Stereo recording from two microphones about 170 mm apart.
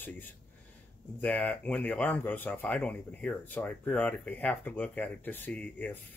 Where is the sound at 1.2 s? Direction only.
10° left (ahead or behind).